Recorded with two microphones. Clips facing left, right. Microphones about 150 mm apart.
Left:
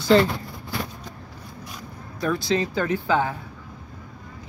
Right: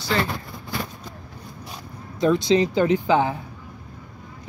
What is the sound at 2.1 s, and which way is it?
Speech, 20° right (ahead or behind).